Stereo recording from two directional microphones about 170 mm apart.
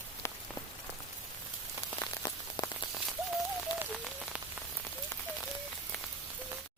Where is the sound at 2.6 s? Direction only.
25° left (ahead or behind).